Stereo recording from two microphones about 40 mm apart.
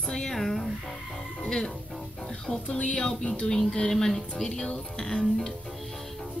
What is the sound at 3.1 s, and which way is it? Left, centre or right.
Music, left.